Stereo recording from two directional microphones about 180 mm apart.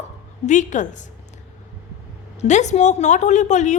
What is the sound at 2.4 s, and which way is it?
A woman's voice, 40° left (ahead or behind).